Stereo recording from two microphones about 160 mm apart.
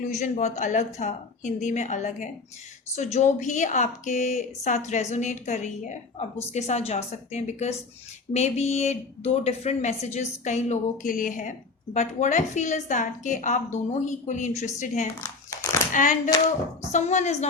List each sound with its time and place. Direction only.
0.0 s a woman's voice: 50° left (ahead or behind)
15.9 s a sound: 55° left (ahead or behind)
16.8 s a woman's voice: 45° left (ahead or behind)